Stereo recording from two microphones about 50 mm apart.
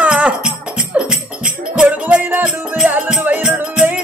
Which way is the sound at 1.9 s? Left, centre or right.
Right.